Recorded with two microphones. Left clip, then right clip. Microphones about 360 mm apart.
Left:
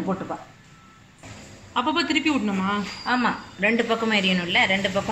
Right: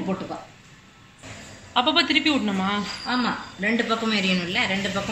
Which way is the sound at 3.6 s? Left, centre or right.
Left.